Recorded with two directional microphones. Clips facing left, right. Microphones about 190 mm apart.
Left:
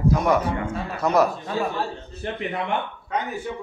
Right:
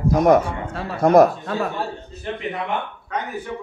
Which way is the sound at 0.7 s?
50° right (ahead or behind).